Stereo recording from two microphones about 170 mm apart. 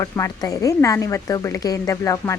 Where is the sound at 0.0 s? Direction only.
20° left (ahead or behind).